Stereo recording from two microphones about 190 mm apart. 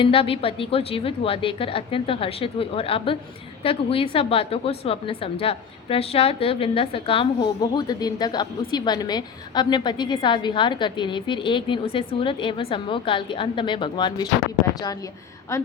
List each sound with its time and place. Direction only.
0.0 s a woman's voice: 30° left (ahead or behind)
15.5 s speech: 15° left (ahead or behind)